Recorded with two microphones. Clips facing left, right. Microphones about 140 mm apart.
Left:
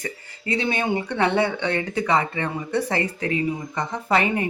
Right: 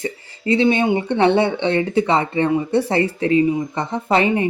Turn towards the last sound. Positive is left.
turn(degrees=-25)  # may be behind; listen again after turning